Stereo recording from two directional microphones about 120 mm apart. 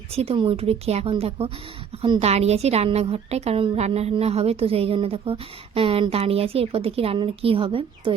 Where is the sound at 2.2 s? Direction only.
60° right (ahead or behind).